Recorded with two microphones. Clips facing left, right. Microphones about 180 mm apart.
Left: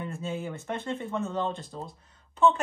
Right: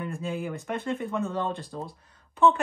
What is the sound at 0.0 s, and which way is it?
Speech, 25° left (ahead or behind).